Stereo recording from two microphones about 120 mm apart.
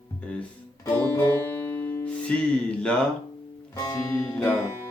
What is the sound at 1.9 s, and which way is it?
Music, 20° left (ahead or behind).